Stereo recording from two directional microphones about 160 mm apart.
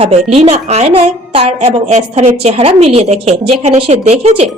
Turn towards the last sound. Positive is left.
turn(degrees=-45)  # may be behind; listen again after turning